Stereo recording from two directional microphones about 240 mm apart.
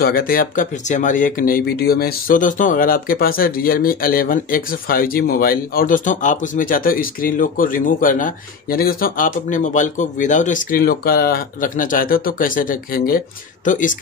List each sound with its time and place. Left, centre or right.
0.0 s speech: left